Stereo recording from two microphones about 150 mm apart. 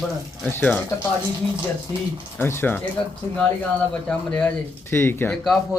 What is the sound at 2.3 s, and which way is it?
Speech, 15° left (ahead or behind).